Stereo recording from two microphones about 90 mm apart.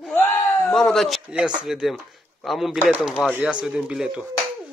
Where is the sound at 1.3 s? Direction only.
10° right (ahead or behind).